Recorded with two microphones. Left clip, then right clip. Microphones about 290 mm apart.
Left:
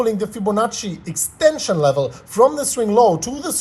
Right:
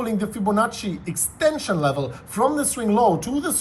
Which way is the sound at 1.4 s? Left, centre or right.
Left.